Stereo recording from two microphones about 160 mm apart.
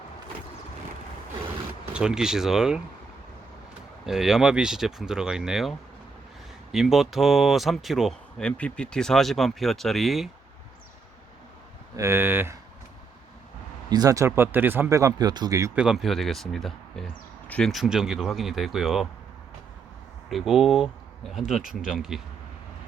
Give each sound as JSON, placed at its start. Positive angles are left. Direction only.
{"t": 1.9, "sound": "speech", "side_deg": -5}
{"t": 4.0, "sound": "speech", "side_deg": -5}
{"t": 11.9, "sound": "speech", "side_deg": -15}
{"t": 13.9, "sound": "speech", "side_deg": -20}
{"t": 15.7, "sound": "speech", "side_deg": -5}
{"t": 20.3, "sound": "speech", "side_deg": 0}